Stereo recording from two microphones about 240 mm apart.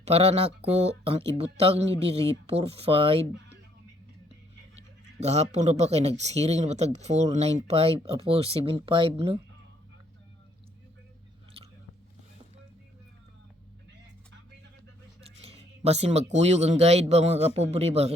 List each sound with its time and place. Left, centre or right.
0.0 s speech: right
5.2 s speech: right
11.6 s biting: right
15.2 s speech: right